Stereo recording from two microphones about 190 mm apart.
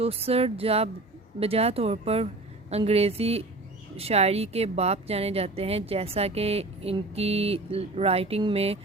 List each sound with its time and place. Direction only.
0.0 s a woman's voice: 30° right (ahead or behind)